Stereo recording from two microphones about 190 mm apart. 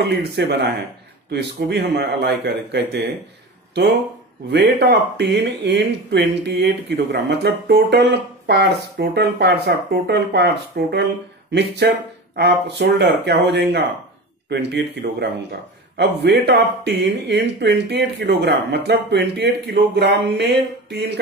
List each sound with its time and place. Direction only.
0.2 s speech: 60° right (ahead or behind)
4.5 s speech: 65° right (ahead or behind)